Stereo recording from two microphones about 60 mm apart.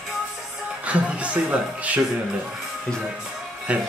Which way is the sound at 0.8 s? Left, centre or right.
Right.